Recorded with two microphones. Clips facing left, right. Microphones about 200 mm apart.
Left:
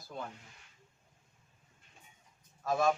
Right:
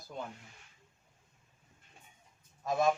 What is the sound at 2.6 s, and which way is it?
Speech, 20° right (ahead or behind).